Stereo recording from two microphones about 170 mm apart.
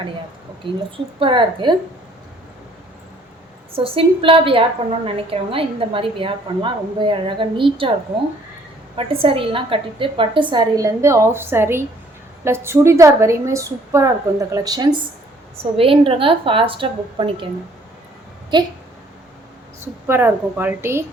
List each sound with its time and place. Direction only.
1.2 s a woman's voice: 30° right (ahead or behind)
3.7 s a woman's voice: 35° right (ahead or behind)
9.0 s a woman's voice: 30° right (ahead or behind)
18.5 s a woman's voice: 25° right (ahead or behind)
19.8 s a woman's voice: 15° right (ahead or behind)